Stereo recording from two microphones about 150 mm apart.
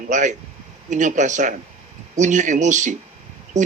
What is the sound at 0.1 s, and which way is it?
A man's voice, 55° right (ahead or behind).